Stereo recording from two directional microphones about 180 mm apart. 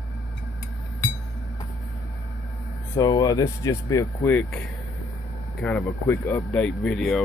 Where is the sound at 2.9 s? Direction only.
20° left (ahead or behind).